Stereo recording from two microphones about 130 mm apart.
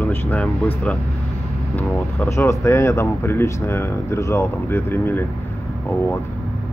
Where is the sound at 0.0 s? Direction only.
15° left (ahead or behind).